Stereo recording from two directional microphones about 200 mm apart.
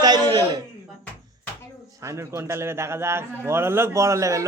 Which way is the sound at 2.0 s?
15° right (ahead or behind).